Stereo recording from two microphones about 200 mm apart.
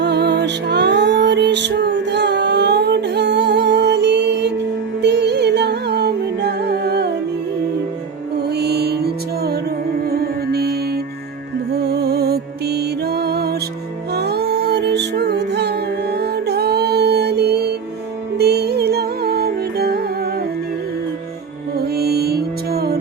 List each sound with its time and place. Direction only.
0.0 s music: 60° right (ahead or behind)
8.4 s music: 55° right (ahead or behind)
21.8 s music: 50° right (ahead or behind)